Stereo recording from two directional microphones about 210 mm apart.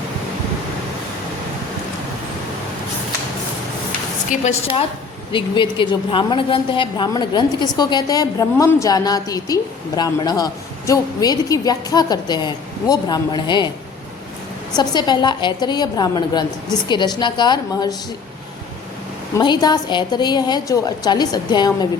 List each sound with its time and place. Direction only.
4.3 s a woman's voice: 30° left (ahead or behind)
14.8 s a woman's voice: 20° left (ahead or behind)
19.4 s a woman's voice: 20° left (ahead or behind)